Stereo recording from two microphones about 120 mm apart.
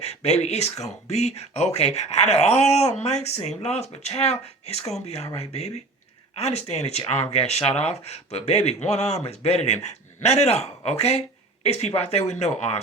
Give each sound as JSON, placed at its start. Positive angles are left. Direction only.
{"t": 0.0, "sound": "speech", "side_deg": 65}
{"t": 6.3, "sound": "speech", "side_deg": 60}